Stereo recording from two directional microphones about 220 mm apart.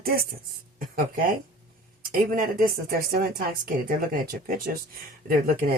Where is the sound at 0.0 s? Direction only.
45° right (ahead or behind).